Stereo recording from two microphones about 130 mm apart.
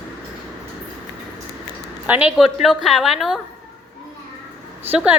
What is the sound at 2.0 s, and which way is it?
A woman's voice, 10° right (ahead or behind).